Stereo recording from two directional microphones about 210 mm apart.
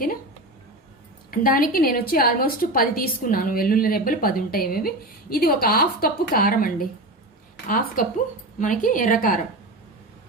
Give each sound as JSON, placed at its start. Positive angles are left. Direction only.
{"t": 1.3, "sound": "a woman's voice", "side_deg": 40}
{"t": 8.0, "sound": "a woman's voice", "side_deg": 40}